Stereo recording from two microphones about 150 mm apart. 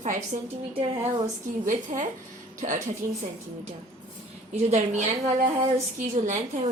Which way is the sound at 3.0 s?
15° right (ahead or behind).